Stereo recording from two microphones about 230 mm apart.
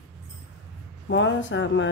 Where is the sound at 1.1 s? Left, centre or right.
Left.